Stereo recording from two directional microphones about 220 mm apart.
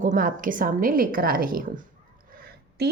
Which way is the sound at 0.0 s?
35° right (ahead or behind).